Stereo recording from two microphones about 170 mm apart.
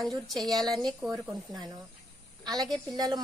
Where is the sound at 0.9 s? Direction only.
Centre (ahead or behind).